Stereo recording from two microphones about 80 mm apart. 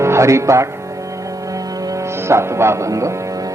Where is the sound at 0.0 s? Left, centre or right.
Right.